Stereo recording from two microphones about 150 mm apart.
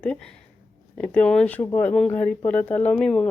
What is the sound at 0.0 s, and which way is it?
Speech, 5° left (ahead or behind).